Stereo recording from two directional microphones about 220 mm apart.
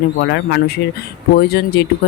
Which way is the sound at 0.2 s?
50° left (ahead or behind).